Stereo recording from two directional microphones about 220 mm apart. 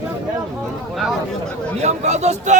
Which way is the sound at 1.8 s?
30° right (ahead or behind).